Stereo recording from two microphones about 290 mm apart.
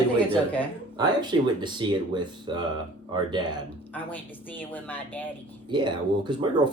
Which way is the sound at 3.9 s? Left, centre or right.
Centre.